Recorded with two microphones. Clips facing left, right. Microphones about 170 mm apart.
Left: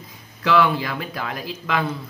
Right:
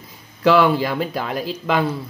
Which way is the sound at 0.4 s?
30° right (ahead or behind).